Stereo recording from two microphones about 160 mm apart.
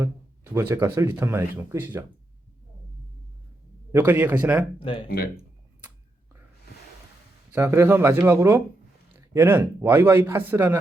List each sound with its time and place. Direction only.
0.5 s speech: 15° right (ahead or behind)
3.9 s speech: 10° right (ahead or behind)
4.8 s speech: 35° left (ahead or behind)
5.0 s speech: 70° left (ahead or behind)
7.5 s speech: 15° right (ahead or behind)